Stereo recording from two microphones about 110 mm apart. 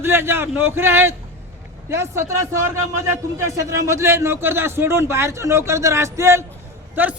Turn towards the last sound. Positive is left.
turn(degrees=-15)  # may be behind; listen again after turning